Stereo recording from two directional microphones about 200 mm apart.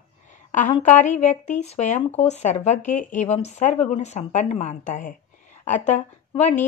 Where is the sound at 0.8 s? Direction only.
35° left (ahead or behind).